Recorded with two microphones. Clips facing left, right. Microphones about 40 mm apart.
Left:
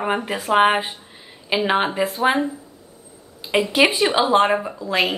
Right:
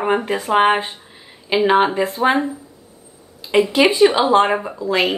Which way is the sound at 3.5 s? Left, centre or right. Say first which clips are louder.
Right 3 dB; centre.